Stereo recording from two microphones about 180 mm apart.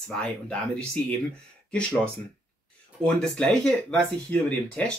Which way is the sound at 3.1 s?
5° left (ahead or behind).